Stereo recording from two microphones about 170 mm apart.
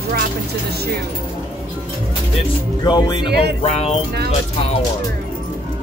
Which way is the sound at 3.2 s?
70° right (ahead or behind).